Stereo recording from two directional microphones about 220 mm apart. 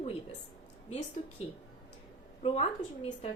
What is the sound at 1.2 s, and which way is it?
Speech, 30° left (ahead or behind).